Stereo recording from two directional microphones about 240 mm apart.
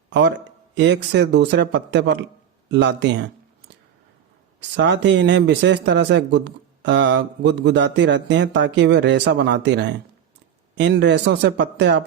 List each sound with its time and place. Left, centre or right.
0.1 s speech: right
4.8 s speech: right